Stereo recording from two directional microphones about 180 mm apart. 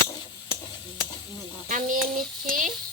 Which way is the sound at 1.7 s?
45° right (ahead or behind).